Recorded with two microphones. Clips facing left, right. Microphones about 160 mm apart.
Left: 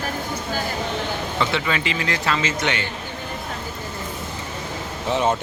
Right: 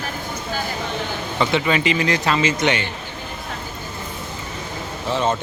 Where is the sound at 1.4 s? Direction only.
20° right (ahead or behind).